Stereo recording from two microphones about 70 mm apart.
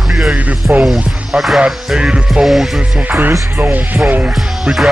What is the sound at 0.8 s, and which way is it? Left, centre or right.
Music, centre.